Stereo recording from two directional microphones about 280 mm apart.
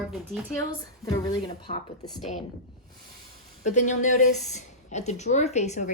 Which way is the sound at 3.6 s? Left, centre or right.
Left.